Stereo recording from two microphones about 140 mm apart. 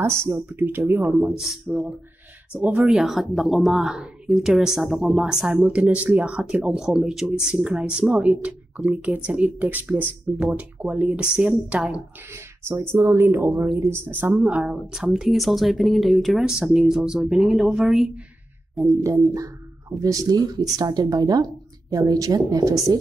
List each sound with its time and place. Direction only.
0.3 s speech: 15° right (ahead or behind)
1.2 s speech: 5° right (ahead or behind)
20.0 s a woman's voice: 25° right (ahead or behind)